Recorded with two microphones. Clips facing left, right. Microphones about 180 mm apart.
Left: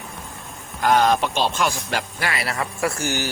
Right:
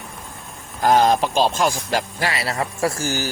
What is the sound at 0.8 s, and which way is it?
A man's voice, 40° right (ahead or behind).